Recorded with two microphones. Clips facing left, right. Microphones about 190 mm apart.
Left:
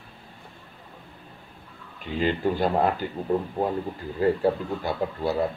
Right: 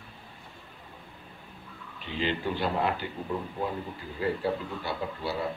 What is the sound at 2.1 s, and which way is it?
Speech, 45° left (ahead or behind).